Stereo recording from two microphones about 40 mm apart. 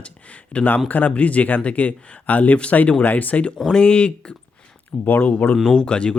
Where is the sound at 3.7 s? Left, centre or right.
Left.